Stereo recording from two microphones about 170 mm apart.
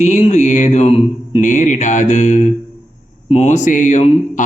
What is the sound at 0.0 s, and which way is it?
Speech, 45° left (ahead or behind).